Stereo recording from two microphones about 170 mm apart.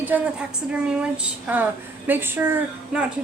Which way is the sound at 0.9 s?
10° right (ahead or behind).